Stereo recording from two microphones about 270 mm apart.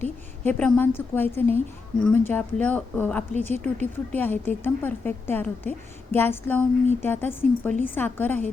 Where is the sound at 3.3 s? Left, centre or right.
Right.